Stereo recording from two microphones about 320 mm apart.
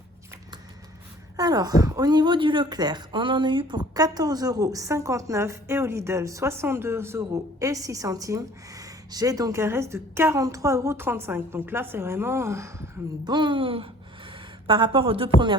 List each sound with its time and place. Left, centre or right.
1.4 s a woman's voice: centre